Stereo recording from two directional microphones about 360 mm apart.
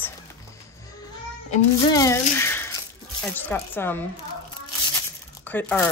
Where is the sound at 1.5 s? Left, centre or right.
Centre.